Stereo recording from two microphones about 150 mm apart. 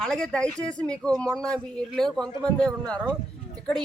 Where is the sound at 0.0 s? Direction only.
5° left (ahead or behind).